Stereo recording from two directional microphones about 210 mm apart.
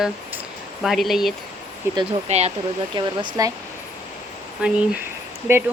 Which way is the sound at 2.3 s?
30° right (ahead or behind).